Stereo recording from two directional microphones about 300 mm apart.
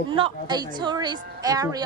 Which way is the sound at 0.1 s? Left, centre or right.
Centre.